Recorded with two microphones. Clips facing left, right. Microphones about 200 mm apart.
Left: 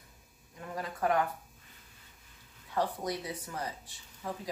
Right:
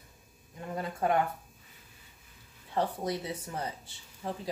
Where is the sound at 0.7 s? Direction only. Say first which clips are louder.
Right 1 dB; 25° right (ahead or behind).